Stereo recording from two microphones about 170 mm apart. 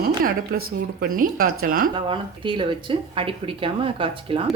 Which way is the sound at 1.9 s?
30° right (ahead or behind).